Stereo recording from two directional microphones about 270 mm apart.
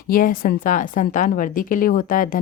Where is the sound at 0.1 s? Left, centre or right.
Left.